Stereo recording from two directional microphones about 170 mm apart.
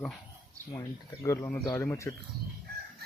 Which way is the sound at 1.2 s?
15° left (ahead or behind).